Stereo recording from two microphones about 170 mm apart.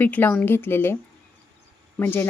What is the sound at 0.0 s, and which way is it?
Speech, 10° left (ahead or behind).